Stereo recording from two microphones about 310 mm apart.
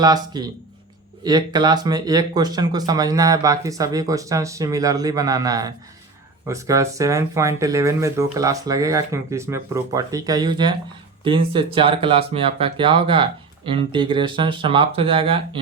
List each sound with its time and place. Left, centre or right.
0.0 s speech: centre